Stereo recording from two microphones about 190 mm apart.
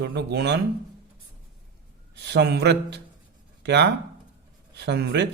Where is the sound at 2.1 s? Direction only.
60° right (ahead or behind).